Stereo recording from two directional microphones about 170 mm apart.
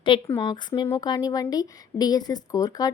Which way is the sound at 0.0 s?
30° left (ahead or behind).